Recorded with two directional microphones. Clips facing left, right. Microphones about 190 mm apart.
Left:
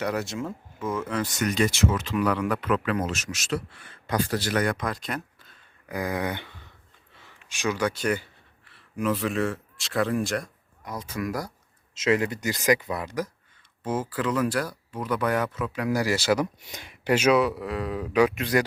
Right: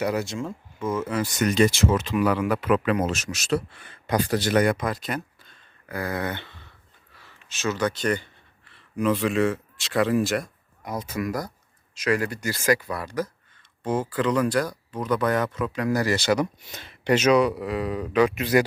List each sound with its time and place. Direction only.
0.0 s speech: centre (ahead or behind)
1.4 s speech: 25° right (ahead or behind)
2.0 s speech: 5° right (ahead or behind)
3.1 s speech: 30° right (ahead or behind)
4.0 s speech: 15° right (ahead or behind)
4.7 s speech: 5° right (ahead or behind)
5.9 s speech: 15° left (ahead or behind)
7.1 s a sound: 20° left (ahead or behind); by 10.9 s 5° right (ahead or behind)
11.0 s speech: 5° right (ahead or behind)
11.3 s speech: 10° left (ahead or behind)
11.9 s speech: 25° left (ahead or behind)
18.3 s speech: 5° right (ahead or behind)